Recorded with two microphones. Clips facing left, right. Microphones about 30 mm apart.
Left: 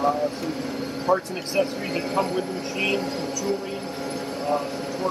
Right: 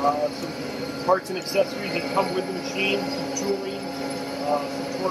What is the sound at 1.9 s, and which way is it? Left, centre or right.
Speech, centre.